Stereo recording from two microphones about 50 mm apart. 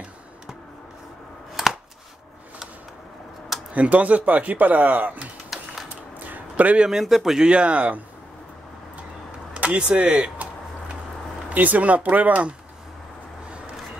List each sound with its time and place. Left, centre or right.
3.7 s speech: right
5.5 s typing: centre
6.1 s a sound: right
6.9 s a man's voice: centre
7.4 s speech: right
9.5 s speech: right
11.4 s speech: right